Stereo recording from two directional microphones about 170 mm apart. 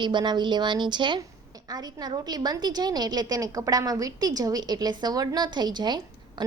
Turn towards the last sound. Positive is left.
turn(degrees=-25)  # may be behind; listen again after turning